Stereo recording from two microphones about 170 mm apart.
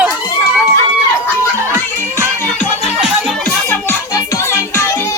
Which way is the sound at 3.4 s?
10° left (ahead or behind).